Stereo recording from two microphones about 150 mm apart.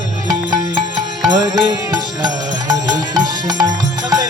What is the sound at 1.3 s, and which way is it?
Music, 25° right (ahead or behind).